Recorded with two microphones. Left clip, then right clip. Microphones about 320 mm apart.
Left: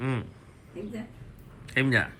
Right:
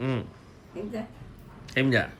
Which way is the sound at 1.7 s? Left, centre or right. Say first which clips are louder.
Even; centre.